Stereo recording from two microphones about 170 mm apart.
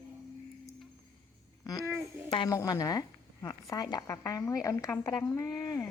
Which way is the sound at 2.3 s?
30° left (ahead or behind).